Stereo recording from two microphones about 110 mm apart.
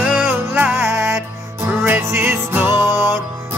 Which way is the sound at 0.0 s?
15° right (ahead or behind).